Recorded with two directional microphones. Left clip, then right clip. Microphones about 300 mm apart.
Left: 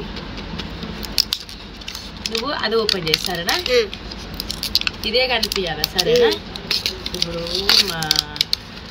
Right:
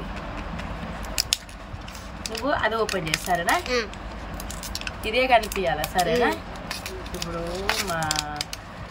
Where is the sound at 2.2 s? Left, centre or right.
Centre.